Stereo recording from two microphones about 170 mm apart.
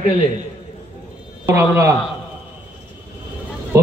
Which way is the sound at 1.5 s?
15° right (ahead or behind).